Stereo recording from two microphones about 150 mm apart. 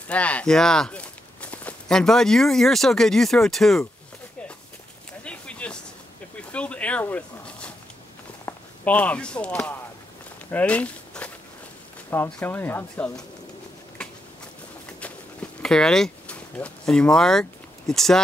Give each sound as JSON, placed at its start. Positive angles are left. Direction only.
{"t": 0.1, "sound": "speech", "side_deg": 10}
{"t": 5.2, "sound": "a sound", "side_deg": 10}
{"t": 6.5, "sound": "dog", "side_deg": 10}
{"t": 8.5, "sound": "speech", "side_deg": 10}
{"t": 10.5, "sound": "a sound", "side_deg": 10}
{"t": 12.1, "sound": "speech", "side_deg": 15}
{"t": 15.6, "sound": "speech", "side_deg": 5}